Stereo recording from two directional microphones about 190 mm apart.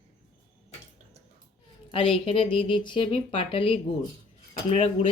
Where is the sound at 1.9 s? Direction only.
30° left (ahead or behind).